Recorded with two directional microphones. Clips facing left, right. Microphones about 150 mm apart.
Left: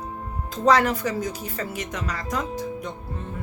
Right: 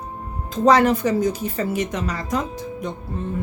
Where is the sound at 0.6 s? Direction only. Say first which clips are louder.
Right 4 dB; 20° right (ahead or behind).